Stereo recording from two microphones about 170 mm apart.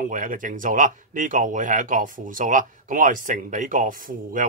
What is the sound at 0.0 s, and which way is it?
Speech, 50° right (ahead or behind).